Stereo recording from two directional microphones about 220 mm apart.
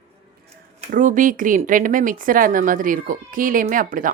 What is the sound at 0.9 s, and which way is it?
Speech, 35° right (ahead or behind).